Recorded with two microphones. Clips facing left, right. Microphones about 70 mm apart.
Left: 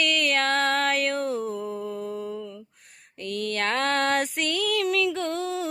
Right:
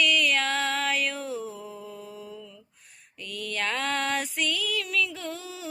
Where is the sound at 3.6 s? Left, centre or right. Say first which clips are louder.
Left 4 dB; left.